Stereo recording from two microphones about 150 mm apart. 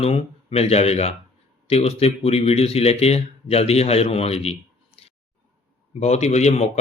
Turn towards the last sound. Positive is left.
turn(degrees=45)  # may be behind; listen again after turning